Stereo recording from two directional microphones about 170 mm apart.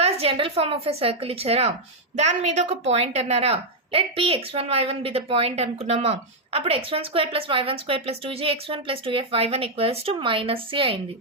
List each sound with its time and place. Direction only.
0.0 s a woman's voice: 35° right (ahead or behind)